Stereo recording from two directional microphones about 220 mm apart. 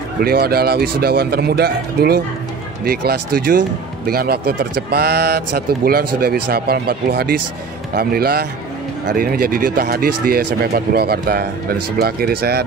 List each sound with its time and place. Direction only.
0.2 s speech: 45° right (ahead or behind)
6.5 s speech: 45° right (ahead or behind)